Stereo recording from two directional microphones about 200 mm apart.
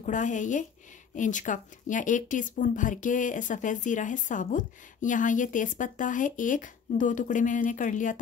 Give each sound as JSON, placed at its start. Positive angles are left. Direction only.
{"t": 0.0, "sound": "speech", "side_deg": 40}